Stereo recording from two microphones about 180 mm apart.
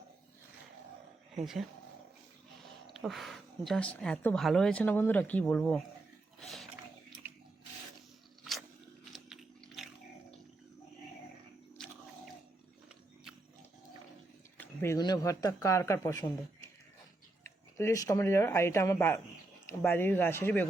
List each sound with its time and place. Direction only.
1.4 s speech: centre (ahead or behind)
2.8 s speech: centre (ahead or behind)
6.4 s a sound: centre (ahead or behind)
9.1 s a sound: centre (ahead or behind)
14.6 s speech: 15° left (ahead or behind)
17.4 s speech: 15° left (ahead or behind)